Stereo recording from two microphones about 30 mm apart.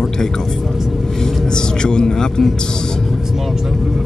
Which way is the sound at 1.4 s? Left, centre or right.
Left.